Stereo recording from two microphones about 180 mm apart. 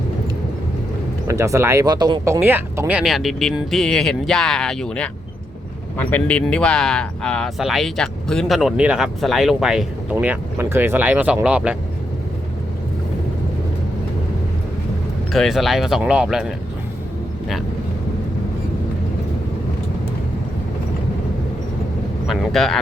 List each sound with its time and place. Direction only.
1.3 s speech: 15° right (ahead or behind)
15.3 s speech: centre (ahead or behind)
22.3 s speech: centre (ahead or behind)